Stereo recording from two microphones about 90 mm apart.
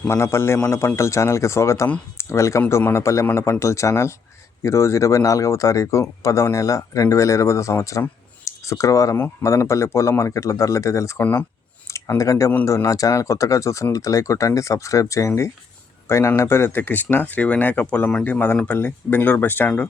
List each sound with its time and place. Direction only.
0.1 s speech: 30° left (ahead or behind)
11.2 s speech: 20° left (ahead or behind)
11.9 s a sound: 35° left (ahead or behind)
12.6 s speech: 35° left (ahead or behind); by 19.7 s 20° left (ahead or behind)